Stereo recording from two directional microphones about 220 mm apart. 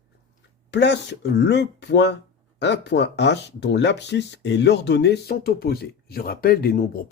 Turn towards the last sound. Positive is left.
turn(degrees=40)  # may be behind; listen again after turning